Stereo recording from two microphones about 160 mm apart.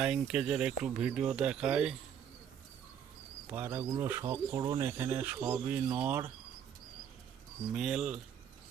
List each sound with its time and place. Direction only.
0.0 s speech: 5° right (ahead or behind)
3.5 s speech: 10° right (ahead or behind)
7.8 s speech: 5° right (ahead or behind)